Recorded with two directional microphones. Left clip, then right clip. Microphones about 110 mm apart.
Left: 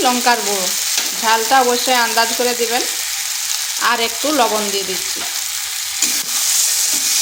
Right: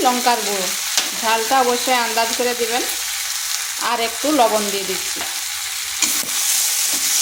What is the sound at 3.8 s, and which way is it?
Frying, 15° left (ahead or behind).